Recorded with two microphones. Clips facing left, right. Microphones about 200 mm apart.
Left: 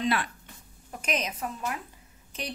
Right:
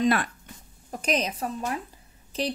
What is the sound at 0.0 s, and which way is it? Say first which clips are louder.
Speech: right 5 dB; 45° right (ahead or behind).